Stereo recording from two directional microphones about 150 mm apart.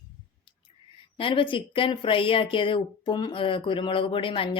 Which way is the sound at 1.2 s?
35° left (ahead or behind).